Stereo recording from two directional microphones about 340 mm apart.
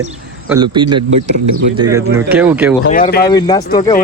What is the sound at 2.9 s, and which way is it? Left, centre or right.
Speech, left.